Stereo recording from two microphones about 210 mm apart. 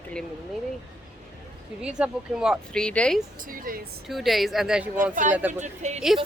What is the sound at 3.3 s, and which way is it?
Speech, 40° right (ahead or behind).